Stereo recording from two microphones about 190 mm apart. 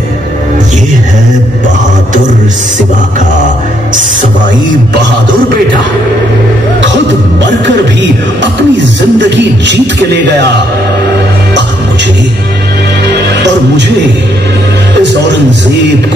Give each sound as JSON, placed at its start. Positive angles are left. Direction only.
{"t": 7.6, "sound": "music", "side_deg": -70}
{"t": 9.4, "sound": "speech", "side_deg": -70}
{"t": 13.1, "sound": "music", "side_deg": -65}